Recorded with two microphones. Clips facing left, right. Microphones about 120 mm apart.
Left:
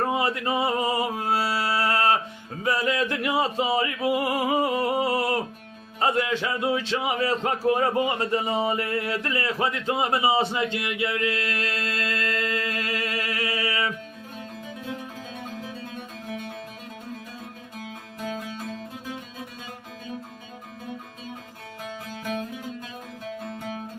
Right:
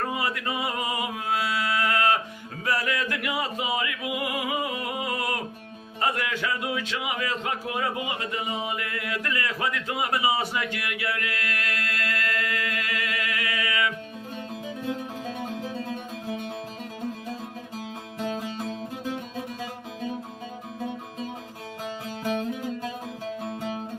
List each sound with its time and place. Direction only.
0.0 s music: 30° left (ahead or behind)
6.0 s a man's voice: 25° left (ahead or behind)